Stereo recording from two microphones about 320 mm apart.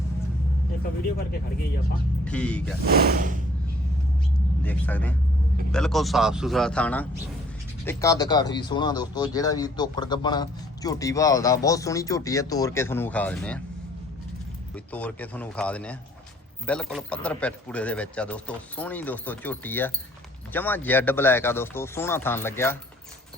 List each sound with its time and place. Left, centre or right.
2.2 s speech: centre
2.8 s speech: right
4.6 s speech: centre
14.9 s speech: centre